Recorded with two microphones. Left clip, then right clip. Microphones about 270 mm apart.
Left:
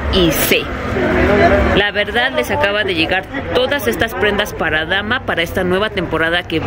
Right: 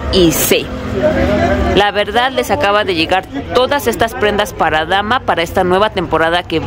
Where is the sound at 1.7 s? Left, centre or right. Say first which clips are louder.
Right 3 dB; centre.